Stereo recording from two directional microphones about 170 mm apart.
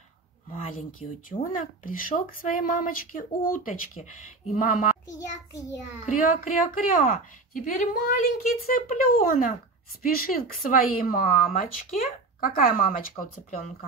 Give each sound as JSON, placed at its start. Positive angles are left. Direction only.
{"t": 1.3, "sound": "speech", "side_deg": 50}
{"t": 6.0, "sound": "a woman's voice", "side_deg": 50}